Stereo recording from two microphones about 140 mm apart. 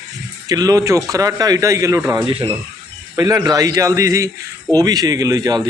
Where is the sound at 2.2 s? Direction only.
40° right (ahead or behind).